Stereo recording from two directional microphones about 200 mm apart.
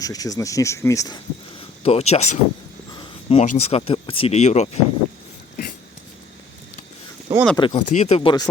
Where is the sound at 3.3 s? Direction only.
30° left (ahead or behind).